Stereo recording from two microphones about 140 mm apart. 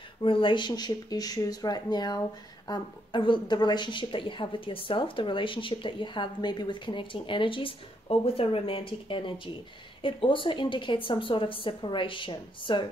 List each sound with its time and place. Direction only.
0.2 s speech: 35° left (ahead or behind)